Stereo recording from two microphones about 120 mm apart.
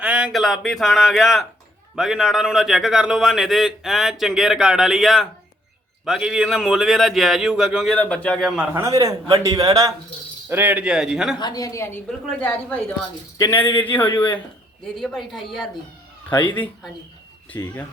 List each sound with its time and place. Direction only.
0.0 s a man's voice: 10° right (ahead or behind)
7.9 s a woman's voice: 10° left (ahead or behind)
8.4 s a man's voice: 5° right (ahead or behind)
8.7 s a man's voice: 25° right (ahead or behind)
10.5 s a man's voice: 15° right (ahead or behind)
11.3 s a woman's voice: 35° left (ahead or behind)
12.0 s a woman's voice: 10° left (ahead or behind)
14.9 s a man's voice: centre (ahead or behind)